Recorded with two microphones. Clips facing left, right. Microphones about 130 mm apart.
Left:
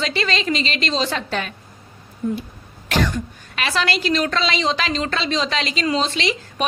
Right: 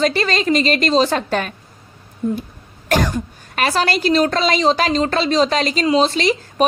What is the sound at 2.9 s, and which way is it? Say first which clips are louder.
A woman's voice: right 3 dB; 45° right (ahead or behind).